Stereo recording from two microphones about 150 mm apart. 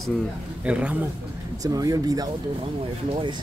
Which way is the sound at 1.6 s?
25° right (ahead or behind).